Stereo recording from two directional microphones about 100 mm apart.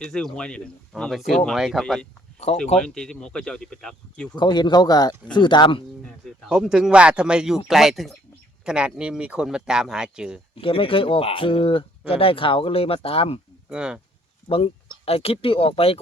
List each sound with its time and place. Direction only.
0.0 s speech: 5° left (ahead or behind)
4.4 s speech: 50° left (ahead or behind)
6.1 s speech: 5° left (ahead or behind)
10.6 s speech: 60° left (ahead or behind)
13.7 s speech: 10° right (ahead or behind)
14.5 s speech: 75° left (ahead or behind)